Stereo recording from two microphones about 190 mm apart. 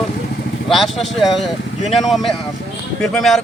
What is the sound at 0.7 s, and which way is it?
Speech, centre (ahead or behind).